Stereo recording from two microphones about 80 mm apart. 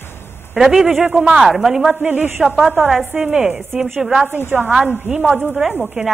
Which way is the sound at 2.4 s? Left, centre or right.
Centre.